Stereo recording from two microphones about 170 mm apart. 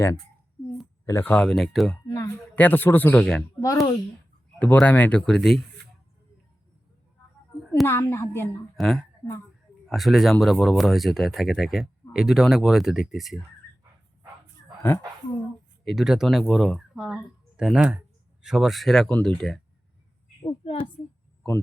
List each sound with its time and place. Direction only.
1.0 s speech: 15° left (ahead or behind)
2.0 s speech: 20° left (ahead or behind)
3.6 s speech: 20° left (ahead or behind)
4.6 s speech: 10° left (ahead or behind)
7.9 s speech: 15° left (ahead or behind)
8.7 s speech: centre (ahead or behind)
14.8 s speech: 15° left (ahead or behind)
15.8 s speech: centre (ahead or behind)
20.4 s a woman's voice: 30° left (ahead or behind)